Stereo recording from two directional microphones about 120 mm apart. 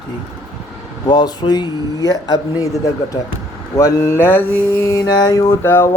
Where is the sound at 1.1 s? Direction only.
35° left (ahead or behind).